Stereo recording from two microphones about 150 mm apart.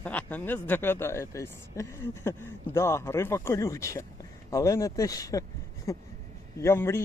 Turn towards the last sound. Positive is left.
turn(degrees=15)  # may be behind; listen again after turning